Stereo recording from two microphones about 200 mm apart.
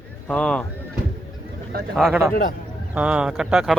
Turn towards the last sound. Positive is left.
turn(degrees=0)  # may be behind; listen again after turning